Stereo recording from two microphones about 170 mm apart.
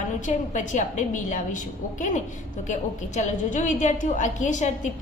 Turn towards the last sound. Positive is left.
turn(degrees=45)  # may be behind; listen again after turning